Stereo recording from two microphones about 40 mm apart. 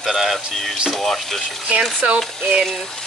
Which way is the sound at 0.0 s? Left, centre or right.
Centre.